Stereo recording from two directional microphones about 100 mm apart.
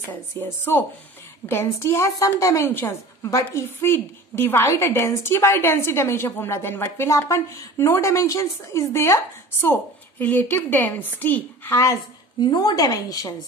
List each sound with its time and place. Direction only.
0.1 s a woman's voice: 20° left (ahead or behind)
11.7 s a woman's voice: 30° left (ahead or behind)